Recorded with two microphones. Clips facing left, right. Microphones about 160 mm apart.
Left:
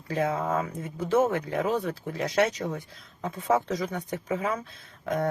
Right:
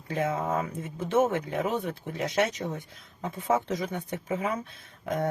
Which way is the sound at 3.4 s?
25° right (ahead or behind).